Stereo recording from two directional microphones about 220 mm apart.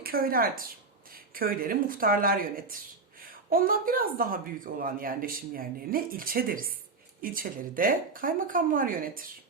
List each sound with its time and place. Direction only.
0.0 s speech: 40° right (ahead or behind)